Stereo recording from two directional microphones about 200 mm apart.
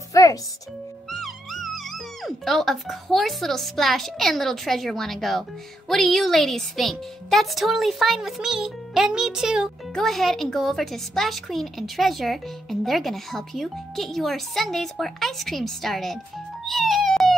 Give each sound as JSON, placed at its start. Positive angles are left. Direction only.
{"t": 0.1, "sound": "music", "side_deg": 15}
{"t": 1.2, "sound": "speech", "side_deg": 0}
{"t": 16.6, "sound": "music", "side_deg": 0}